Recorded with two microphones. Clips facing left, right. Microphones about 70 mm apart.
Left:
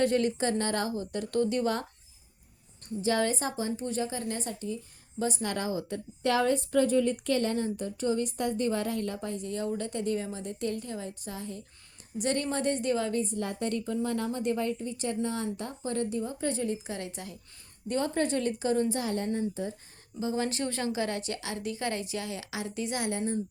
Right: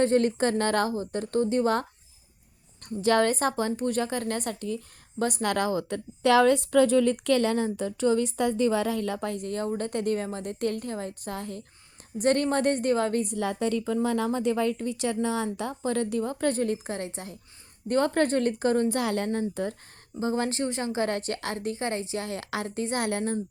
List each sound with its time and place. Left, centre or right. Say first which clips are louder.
0.0 s speech: right 4 dB; right
0.9 s a woman's voice: right 2 dB; right
2.8 s a woman's voice: right 5 dB; right
13.2 s a woman's voice: right 4 dB; right
17.8 s speech: right 5 dB; right
18.9 s a woman's voice: right 3 dB; right
20.1 s a woman's voice: right 3 dB; right
20.6 s a woman's voice: right 2 dB; right
20.9 s a woman's voice: right 4 dB; right
23.0 s a woman's voice: right 3 dB; right